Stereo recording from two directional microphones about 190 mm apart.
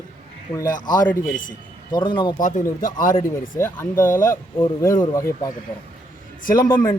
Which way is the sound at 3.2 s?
15° left (ahead or behind).